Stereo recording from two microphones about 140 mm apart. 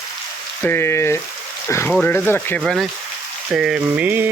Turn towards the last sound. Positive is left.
turn(degrees=-10)  # may be behind; listen again after turning